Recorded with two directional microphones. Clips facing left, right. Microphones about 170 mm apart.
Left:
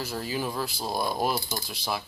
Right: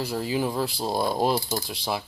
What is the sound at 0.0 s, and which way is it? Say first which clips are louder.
Speech: right 5 dB; 15° right (ahead or behind).